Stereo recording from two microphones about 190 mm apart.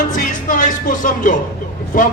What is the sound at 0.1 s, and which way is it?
Music, 45° left (ahead or behind).